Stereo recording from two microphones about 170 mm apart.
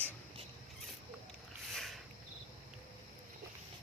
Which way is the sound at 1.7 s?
Centre (ahead or behind).